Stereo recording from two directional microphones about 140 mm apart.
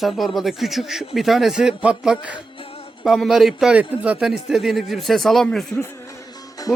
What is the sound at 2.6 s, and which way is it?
Music, 45° left (ahead or behind).